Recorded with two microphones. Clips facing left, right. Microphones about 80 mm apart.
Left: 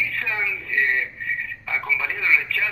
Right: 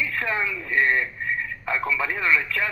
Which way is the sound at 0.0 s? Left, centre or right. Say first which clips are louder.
Right 1 dB; right.